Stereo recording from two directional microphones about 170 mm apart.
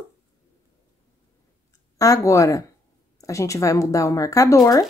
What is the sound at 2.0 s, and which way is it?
A woman's voice, 20° left (ahead or behind).